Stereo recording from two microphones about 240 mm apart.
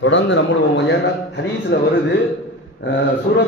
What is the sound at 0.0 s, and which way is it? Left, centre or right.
Speech, left.